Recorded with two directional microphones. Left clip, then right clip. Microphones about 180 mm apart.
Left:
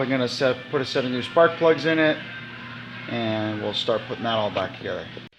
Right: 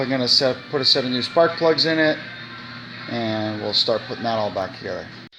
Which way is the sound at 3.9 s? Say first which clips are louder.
Right 2 dB; 15° right (ahead or behind).